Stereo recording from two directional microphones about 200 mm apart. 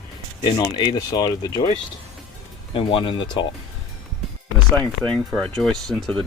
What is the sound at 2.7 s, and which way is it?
Speech, 25° left (ahead or behind).